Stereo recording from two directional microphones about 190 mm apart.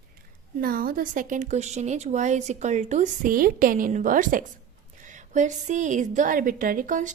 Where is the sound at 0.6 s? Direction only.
50° right (ahead or behind).